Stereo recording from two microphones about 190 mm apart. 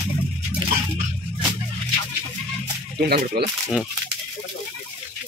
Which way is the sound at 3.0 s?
55° right (ahead or behind).